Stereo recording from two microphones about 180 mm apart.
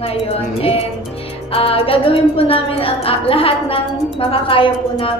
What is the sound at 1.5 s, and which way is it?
A woman's voice, 30° left (ahead or behind).